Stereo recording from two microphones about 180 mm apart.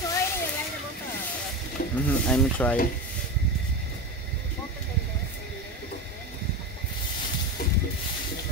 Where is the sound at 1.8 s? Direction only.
55° left (ahead or behind).